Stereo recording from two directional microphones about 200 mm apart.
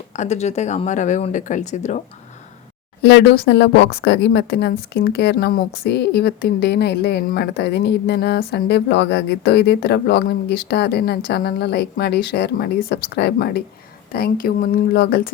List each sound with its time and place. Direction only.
0.1 s speech: 35° left (ahead or behind)
3.0 s speech: 55° left (ahead or behind)